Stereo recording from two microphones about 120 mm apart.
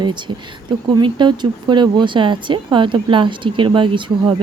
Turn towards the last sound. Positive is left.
turn(degrees=-40)  # may be behind; listen again after turning